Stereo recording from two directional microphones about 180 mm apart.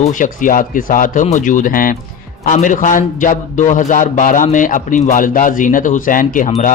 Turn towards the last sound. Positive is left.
turn(degrees=50)  # may be behind; listen again after turning